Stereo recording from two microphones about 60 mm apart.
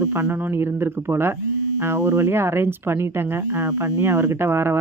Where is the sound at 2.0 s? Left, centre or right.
Right.